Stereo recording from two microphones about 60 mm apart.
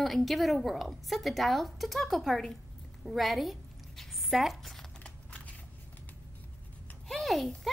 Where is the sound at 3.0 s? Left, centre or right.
Centre.